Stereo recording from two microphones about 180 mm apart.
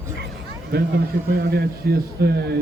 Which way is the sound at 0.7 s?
60° right (ahead or behind).